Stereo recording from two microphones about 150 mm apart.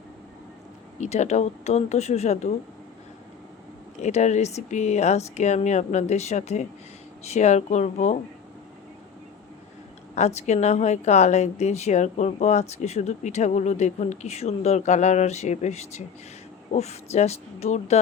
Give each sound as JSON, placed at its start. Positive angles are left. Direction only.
{"t": 0.9, "sound": "a woman's voice", "side_deg": 50}
{"t": 4.0, "sound": "a woman's voice", "side_deg": 50}
{"t": 10.2, "sound": "a woman's voice", "side_deg": 50}